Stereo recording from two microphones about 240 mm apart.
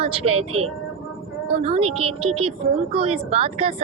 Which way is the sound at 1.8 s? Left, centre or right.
Right.